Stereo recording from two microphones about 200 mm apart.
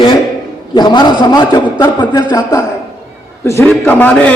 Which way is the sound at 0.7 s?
20° left (ahead or behind).